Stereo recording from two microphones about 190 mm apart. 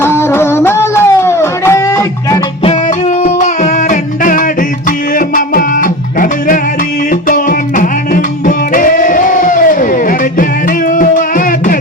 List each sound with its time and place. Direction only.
0.0 s music: 15° left (ahead or behind)
3.2 s music: 40° left (ahead or behind)